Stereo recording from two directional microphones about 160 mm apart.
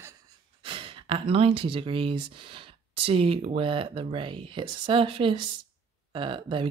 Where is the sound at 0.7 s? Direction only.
35° right (ahead or behind).